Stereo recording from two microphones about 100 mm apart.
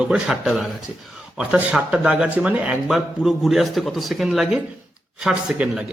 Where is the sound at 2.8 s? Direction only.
Centre (ahead or behind).